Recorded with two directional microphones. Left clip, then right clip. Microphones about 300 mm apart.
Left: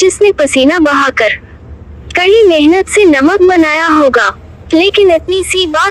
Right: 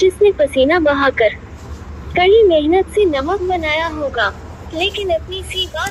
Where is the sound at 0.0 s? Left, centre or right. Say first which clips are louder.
Left 4 dB; left.